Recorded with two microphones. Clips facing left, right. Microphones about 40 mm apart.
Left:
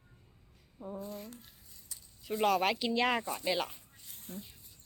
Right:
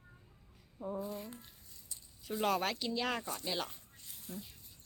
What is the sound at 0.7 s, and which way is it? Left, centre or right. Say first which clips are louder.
Speech: right 2 dB; centre.